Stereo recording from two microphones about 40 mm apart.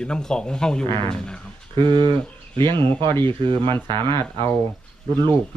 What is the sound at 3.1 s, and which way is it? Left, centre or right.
Speech, left.